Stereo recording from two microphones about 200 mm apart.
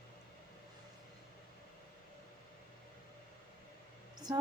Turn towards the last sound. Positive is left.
turn(degrees=-20)  # may be behind; listen again after turning